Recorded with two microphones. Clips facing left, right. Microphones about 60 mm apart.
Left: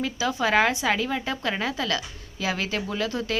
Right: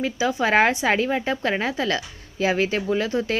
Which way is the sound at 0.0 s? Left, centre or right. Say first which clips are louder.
Right 3 dB; right.